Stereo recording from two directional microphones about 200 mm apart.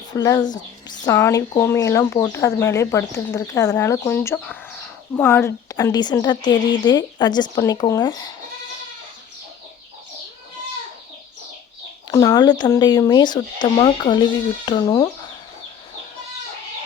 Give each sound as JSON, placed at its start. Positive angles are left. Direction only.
{"t": 0.1, "sound": "speech", "side_deg": 15}
{"t": 12.1, "sound": "speech", "side_deg": 15}